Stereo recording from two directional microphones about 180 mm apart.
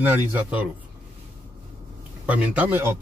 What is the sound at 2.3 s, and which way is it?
Speech, 10° right (ahead or behind).